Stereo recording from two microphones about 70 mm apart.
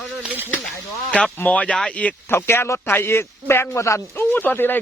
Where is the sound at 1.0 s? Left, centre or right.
Centre.